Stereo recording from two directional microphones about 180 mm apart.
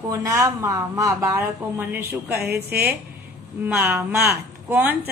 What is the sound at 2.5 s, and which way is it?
Speech, 60° right (ahead or behind).